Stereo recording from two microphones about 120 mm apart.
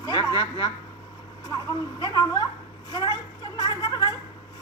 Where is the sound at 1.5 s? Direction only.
35° left (ahead or behind).